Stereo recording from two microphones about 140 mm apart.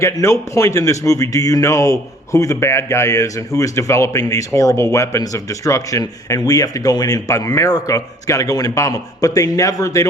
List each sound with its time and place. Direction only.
0.0 s speech: 20° left (ahead or behind)